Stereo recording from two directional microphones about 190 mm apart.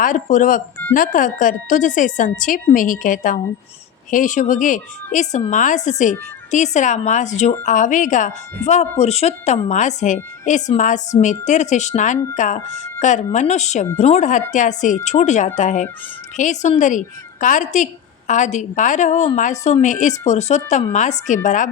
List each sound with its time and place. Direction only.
0.0 s a woman's voice: 40° left (ahead or behind)